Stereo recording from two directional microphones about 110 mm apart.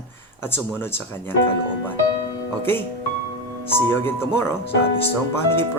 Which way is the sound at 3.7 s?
20° left (ahead or behind).